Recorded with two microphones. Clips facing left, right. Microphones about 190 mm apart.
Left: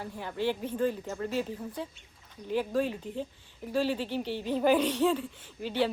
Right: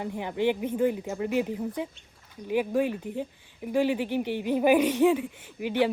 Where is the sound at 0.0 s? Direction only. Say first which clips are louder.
Right 5 dB; 20° right (ahead or behind).